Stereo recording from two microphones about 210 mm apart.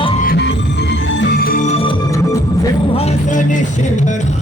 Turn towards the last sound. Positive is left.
turn(degrees=35)  # may be behind; listen again after turning